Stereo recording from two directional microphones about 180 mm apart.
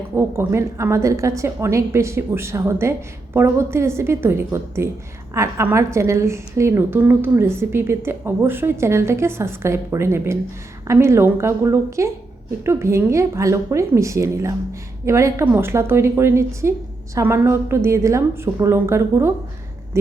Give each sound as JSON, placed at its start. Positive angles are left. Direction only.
{"t": 0.2, "sound": "a woman's voice", "side_deg": -15}